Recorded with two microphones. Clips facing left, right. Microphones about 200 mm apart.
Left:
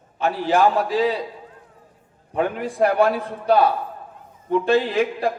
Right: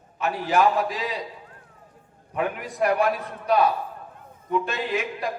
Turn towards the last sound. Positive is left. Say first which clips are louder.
# left 7 dB
turn(degrees=30)  # may be behind; listen again after turning